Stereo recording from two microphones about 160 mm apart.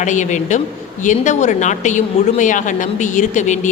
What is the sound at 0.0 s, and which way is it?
A woman's voice, 50° left (ahead or behind).